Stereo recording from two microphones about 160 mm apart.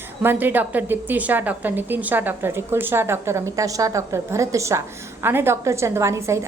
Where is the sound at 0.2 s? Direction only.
15° right (ahead or behind).